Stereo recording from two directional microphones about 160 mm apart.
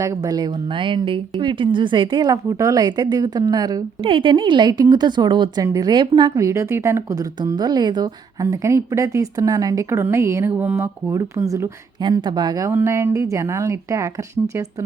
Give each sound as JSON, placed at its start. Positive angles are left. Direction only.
{"t": 0.0, "sound": "a woman's voice", "side_deg": -20}